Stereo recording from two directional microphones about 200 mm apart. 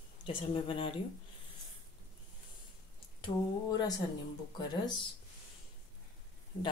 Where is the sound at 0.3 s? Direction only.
25° left (ahead or behind).